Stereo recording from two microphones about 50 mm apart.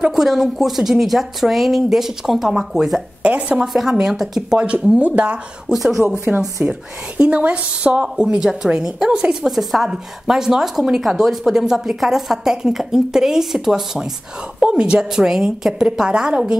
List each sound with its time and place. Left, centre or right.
0.1 s speech: centre
3.2 s a sound: right
3.6 s speech: centre
4.4 s speech: right
5.7 s speech: centre
7.2 s speech: right; by 14.0 s centre
14.7 s speech: centre